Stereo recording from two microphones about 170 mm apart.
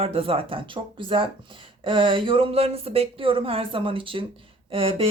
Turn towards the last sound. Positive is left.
turn(degrees=-35)  # may be behind; listen again after turning